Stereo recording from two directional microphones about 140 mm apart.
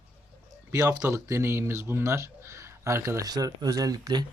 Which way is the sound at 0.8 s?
25° right (ahead or behind).